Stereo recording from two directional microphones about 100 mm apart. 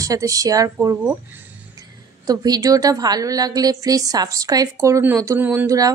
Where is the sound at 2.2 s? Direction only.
40° right (ahead or behind).